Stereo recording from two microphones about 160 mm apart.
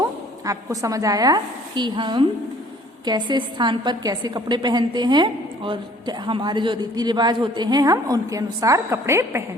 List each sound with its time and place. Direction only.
0.4 s a woman's voice: 20° right (ahead or behind)